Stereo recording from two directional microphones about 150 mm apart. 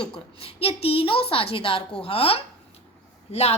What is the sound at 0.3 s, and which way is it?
A woman's voice, 40° left (ahead or behind).